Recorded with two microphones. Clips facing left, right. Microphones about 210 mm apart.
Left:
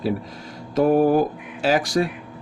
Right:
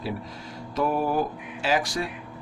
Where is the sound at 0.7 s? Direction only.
50° left (ahead or behind).